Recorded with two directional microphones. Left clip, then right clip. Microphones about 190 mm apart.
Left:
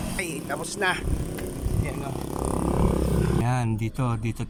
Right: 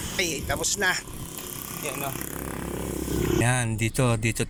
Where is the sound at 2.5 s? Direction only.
20° left (ahead or behind).